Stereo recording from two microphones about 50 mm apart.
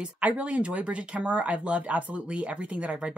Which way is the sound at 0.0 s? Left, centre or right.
Right.